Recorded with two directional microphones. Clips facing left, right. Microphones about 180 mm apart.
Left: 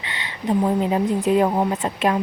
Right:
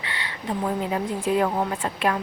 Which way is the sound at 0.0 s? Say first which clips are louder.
Left 4 dB; 20° left (ahead or behind).